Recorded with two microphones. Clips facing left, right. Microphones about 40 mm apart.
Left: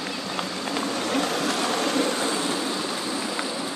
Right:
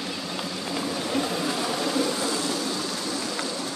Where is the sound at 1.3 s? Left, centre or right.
Left.